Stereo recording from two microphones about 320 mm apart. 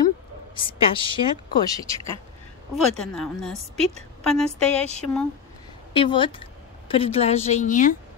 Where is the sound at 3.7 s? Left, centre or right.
Centre.